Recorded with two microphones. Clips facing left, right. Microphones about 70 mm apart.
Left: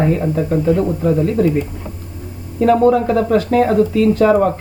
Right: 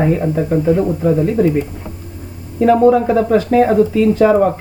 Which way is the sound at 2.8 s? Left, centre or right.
Centre.